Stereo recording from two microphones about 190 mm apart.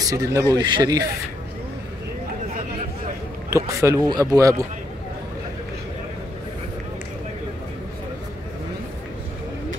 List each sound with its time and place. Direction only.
0.1 s speech: 20° right (ahead or behind)
3.4 s speech: 15° right (ahead or behind)